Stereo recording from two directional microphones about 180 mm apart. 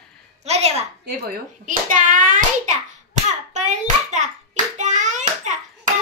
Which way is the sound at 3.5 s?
40° right (ahead or behind).